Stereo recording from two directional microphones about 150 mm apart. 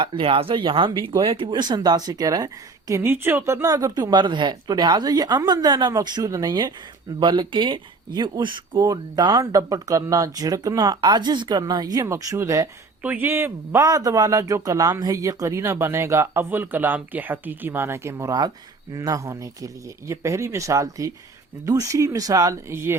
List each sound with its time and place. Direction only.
0.0 s speech: 35° right (ahead or behind)
13.0 s speech: 10° right (ahead or behind)